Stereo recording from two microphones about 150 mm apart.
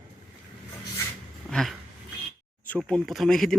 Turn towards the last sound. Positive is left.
turn(degrees=0)  # may be behind; listen again after turning